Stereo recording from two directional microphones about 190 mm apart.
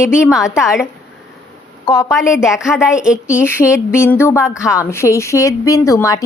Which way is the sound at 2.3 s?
5° right (ahead or behind).